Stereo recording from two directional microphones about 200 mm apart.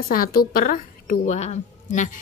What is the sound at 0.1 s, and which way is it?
Speech, 45° left (ahead or behind).